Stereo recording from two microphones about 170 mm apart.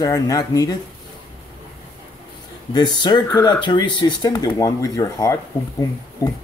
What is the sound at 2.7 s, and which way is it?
Speech, 25° left (ahead or behind).